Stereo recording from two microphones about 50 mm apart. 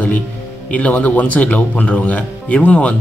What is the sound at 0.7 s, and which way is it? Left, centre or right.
A man's voice, left.